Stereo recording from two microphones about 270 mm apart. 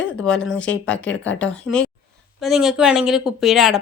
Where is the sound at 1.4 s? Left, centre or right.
Centre.